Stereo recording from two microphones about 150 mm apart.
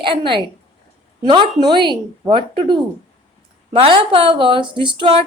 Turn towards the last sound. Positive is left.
turn(degrees=-35)  # may be behind; listen again after turning